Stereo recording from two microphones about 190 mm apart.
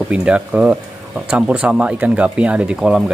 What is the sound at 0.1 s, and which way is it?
Speech, 5° right (ahead or behind).